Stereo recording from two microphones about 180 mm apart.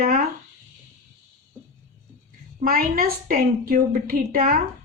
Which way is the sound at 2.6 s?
55° right (ahead or behind).